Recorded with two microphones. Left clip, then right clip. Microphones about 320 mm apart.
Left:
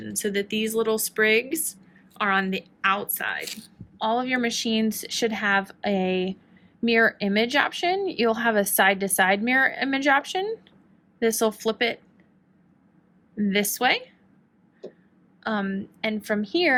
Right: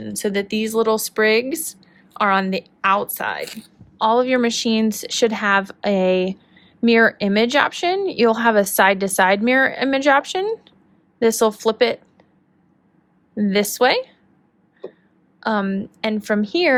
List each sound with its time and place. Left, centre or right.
0.1 s speech: centre
13.4 s speech: centre
15.4 s a woman's voice: centre